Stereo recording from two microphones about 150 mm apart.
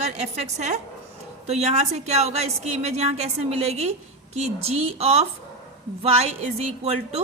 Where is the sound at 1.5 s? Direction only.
45° right (ahead or behind).